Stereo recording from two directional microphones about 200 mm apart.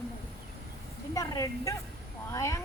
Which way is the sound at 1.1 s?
15° left (ahead or behind).